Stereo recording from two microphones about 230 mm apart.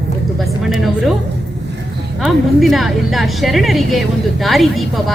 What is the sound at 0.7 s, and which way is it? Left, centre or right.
Speech, centre.